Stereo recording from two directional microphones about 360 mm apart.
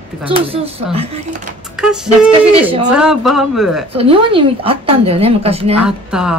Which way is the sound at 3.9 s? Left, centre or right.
Centre.